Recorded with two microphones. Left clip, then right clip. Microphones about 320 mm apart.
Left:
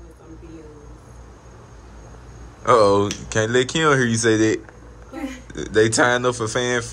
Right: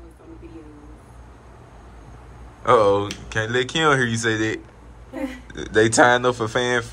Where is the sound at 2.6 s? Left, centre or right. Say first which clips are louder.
Left 1 dB; centre.